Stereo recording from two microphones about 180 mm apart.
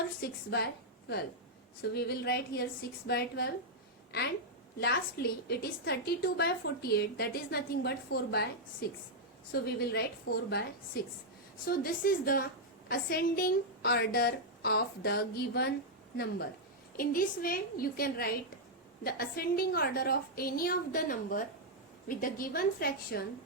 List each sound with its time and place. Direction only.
0.2 s a woman's voice: 65° left (ahead or behind)
4.8 s a woman's voice: 60° left (ahead or behind)
11.6 s a woman's voice: 55° left (ahead or behind)
17.0 s a woman's voice: 50° left (ahead or behind)